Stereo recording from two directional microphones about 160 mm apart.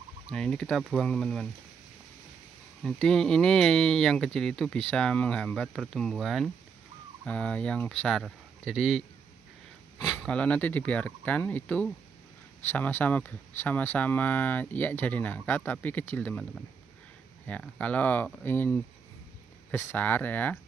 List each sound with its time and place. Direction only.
0.3 s speech: 5° left (ahead or behind)
2.8 s speech: 5° left (ahead or behind)
10.0 s speech: 5° left (ahead or behind)